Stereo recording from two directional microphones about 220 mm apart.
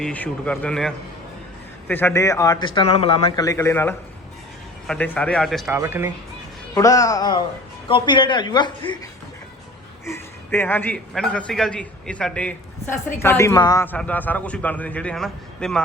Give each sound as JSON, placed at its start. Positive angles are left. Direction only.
{"t": 0.0, "sound": "a man's voice", "side_deg": 5}
{"t": 5.7, "sound": "speech", "side_deg": -10}
{"t": 6.7, "sound": "a man's voice", "side_deg": 15}
{"t": 10.1, "sound": "a man's voice", "side_deg": 10}